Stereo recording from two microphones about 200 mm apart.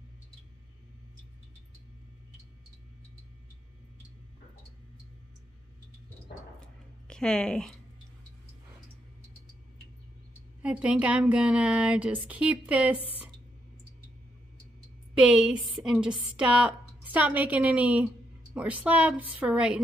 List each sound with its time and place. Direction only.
7.1 s a woman's voice: 5° left (ahead or behind)
10.6 s a woman's voice: 5° right (ahead or behind)
15.1 s a woman's voice: 5° right (ahead or behind)